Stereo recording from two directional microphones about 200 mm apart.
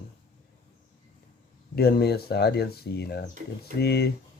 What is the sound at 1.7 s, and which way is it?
Speech, 50° left (ahead or behind).